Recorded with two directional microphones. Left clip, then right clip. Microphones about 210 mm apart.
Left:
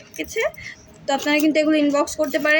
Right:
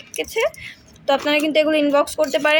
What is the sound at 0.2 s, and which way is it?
Speech, 45° right (ahead or behind).